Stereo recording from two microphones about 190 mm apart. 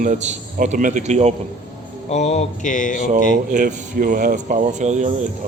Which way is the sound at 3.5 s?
40° right (ahead or behind).